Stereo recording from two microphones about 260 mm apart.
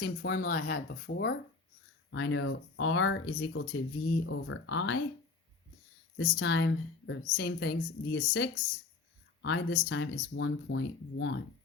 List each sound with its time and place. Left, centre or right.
0.0 s a woman's voice: left
6.1 s a woman's voice: left